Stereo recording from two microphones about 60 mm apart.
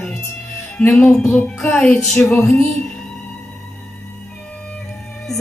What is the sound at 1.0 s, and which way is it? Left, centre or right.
Music, left.